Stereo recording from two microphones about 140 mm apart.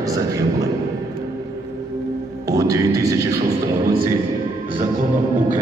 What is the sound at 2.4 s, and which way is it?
A man's voice, 25° right (ahead or behind).